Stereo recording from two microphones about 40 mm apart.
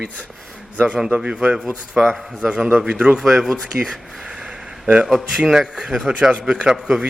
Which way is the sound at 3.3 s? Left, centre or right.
Centre.